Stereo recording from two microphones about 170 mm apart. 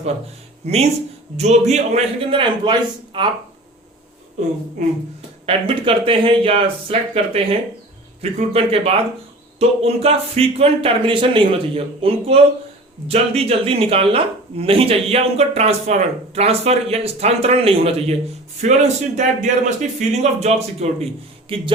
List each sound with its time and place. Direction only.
0.6 s speech: 40° right (ahead or behind)
5.5 s speech: 30° right (ahead or behind)